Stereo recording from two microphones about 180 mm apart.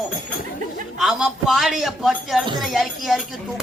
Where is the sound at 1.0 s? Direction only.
5° right (ahead or behind).